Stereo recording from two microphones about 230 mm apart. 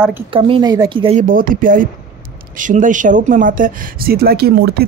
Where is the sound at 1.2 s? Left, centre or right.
Right.